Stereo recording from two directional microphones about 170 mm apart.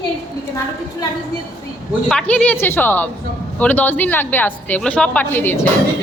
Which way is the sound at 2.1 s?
5° left (ahead or behind).